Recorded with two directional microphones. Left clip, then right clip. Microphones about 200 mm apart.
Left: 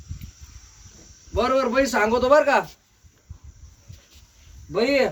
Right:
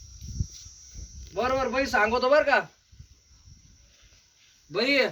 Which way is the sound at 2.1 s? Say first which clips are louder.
Left 5 dB; 45° left (ahead or behind).